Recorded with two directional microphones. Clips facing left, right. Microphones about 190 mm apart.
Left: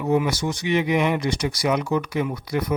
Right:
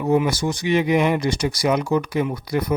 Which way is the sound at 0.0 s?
30° right (ahead or behind).